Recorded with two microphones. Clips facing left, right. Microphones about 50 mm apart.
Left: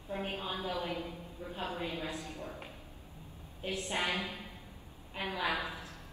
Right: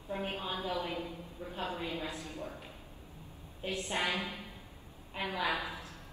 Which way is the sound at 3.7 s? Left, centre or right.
Right.